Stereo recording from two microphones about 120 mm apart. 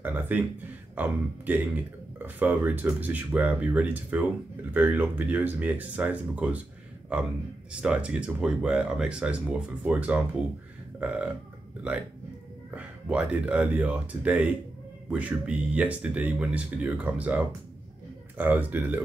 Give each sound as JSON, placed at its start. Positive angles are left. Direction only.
{"t": 0.0, "sound": "a man's voice", "side_deg": -15}
{"t": 7.8, "sound": "speech", "side_deg": -10}
{"t": 11.0, "sound": "burping", "side_deg": -10}
{"t": 11.9, "sound": "speech", "side_deg": -10}